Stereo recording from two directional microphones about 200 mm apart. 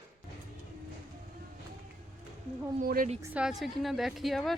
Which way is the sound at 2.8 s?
45° right (ahead or behind).